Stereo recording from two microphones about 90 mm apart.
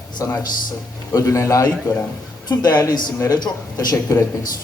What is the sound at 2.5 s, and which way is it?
Speech, 50° left (ahead or behind).